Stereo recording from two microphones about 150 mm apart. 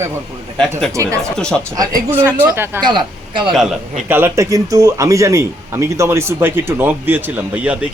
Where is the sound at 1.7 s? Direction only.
25° right (ahead or behind).